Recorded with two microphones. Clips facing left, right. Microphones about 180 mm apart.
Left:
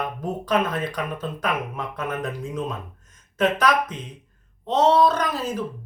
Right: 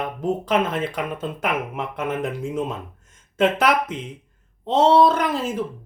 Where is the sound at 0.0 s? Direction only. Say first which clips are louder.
Right 4 dB; 25° right (ahead or behind).